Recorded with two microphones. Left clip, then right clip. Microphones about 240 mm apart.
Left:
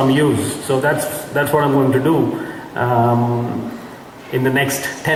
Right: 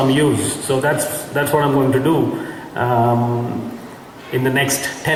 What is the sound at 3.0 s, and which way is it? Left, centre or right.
Mantra, left.